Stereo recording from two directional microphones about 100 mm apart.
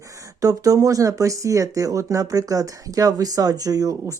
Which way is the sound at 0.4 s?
35° right (ahead or behind).